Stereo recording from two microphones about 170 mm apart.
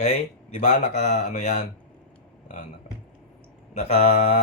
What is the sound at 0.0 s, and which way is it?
A man's voice, 45° left (ahead or behind).